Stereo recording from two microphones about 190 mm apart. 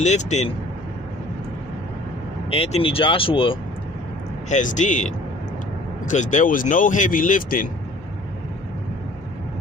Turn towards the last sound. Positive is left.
turn(degrees=45)  # may be behind; listen again after turning